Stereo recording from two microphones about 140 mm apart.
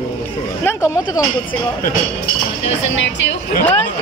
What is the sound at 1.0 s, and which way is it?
Speech, 30° left (ahead or behind).